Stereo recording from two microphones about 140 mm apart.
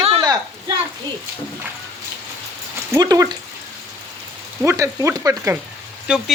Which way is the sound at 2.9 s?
25° right (ahead or behind).